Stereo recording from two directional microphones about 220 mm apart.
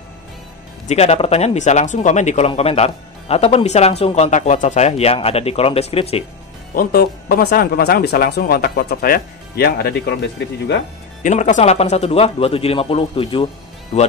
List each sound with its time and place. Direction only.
0.8 s speech: 30° left (ahead or behind)
6.7 s speech: 40° left (ahead or behind)
11.2 s speech: 30° left (ahead or behind)